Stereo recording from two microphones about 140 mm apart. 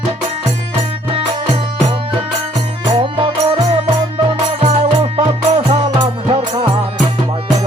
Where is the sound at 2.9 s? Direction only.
40° right (ahead or behind).